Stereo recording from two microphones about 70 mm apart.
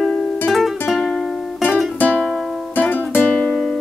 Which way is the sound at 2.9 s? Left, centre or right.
Left.